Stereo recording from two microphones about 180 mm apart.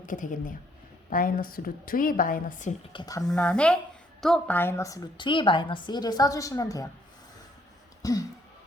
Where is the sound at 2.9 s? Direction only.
20° left (ahead or behind).